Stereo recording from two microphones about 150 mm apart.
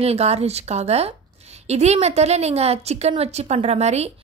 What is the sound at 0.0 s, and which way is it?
A woman's voice, 45° right (ahead or behind).